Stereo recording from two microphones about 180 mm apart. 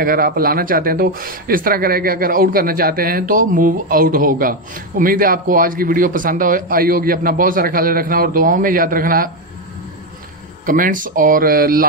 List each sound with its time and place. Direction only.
0.0 s speech: 55° right (ahead or behind)
10.6 s speech: 50° right (ahead or behind)